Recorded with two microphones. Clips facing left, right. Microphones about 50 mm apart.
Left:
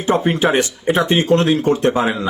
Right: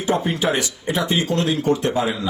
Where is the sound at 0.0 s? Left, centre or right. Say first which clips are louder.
Left 5 dB; left.